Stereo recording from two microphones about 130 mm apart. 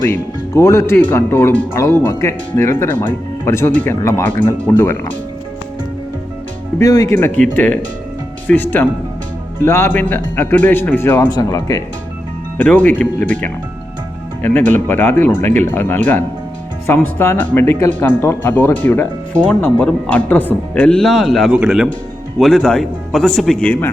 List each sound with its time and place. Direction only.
0.1 s speech: 20° left (ahead or behind)
6.7 s speech: 25° left (ahead or behind)
7.1 s speech: 15° left (ahead or behind)
11.3 s speech: 25° left (ahead or behind)
12.5 s a man's voice: 10° left (ahead or behind)